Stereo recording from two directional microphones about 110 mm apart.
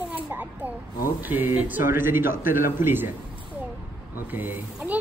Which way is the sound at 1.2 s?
15° right (ahead or behind).